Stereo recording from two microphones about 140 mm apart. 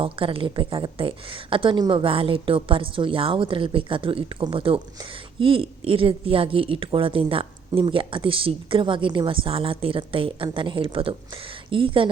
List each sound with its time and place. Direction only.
0.0 s a woman's voice: 40° right (ahead or behind)